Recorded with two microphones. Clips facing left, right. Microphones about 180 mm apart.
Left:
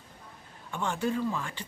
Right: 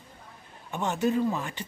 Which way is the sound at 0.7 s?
20° right (ahead or behind).